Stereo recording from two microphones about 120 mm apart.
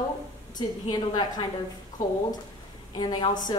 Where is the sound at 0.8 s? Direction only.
35° left (ahead or behind).